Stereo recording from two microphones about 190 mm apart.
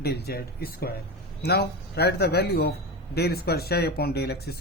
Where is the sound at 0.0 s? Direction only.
60° left (ahead or behind).